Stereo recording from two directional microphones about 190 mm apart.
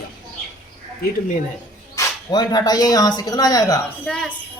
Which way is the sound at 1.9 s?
20° left (ahead or behind).